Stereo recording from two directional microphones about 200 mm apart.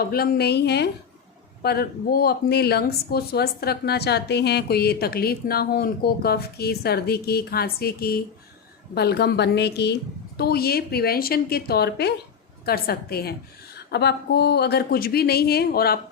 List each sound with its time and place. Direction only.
0.0 s speech: 50° left (ahead or behind)